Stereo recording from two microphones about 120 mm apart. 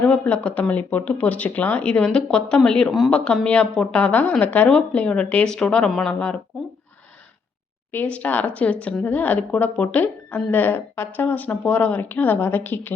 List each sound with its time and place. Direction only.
0.0 s speech: 15° left (ahead or behind)
7.9 s speech: 10° left (ahead or behind)